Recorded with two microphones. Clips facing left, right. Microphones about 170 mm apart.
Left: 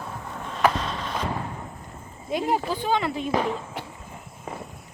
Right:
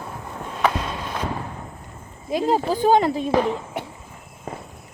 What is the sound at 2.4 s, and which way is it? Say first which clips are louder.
Speech: right 7 dB; 40° right (ahead or behind).